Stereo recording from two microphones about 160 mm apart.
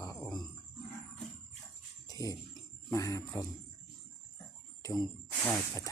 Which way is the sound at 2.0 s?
20° left (ahead or behind).